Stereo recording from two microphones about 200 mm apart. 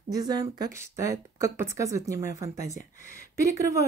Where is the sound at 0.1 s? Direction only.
20° right (ahead or behind).